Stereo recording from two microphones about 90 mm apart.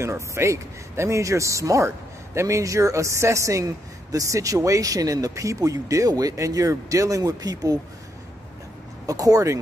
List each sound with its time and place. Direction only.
0.0 s a woman's voice: 30° right (ahead or behind)
9.0 s a woman's voice: 40° right (ahead or behind)